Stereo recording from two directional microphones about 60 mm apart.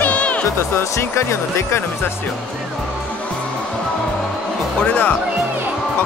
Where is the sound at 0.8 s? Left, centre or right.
Left.